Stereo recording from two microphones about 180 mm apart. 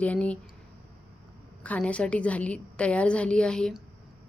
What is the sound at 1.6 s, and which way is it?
Speech, 5° left (ahead or behind).